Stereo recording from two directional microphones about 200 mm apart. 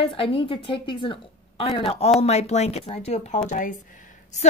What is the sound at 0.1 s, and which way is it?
A woman's voice, 25° left (ahead or behind).